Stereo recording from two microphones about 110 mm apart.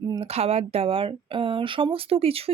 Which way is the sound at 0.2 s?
65° right (ahead or behind).